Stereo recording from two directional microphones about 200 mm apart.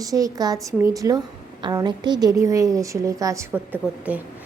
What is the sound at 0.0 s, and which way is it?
A woman's voice, 15° right (ahead or behind).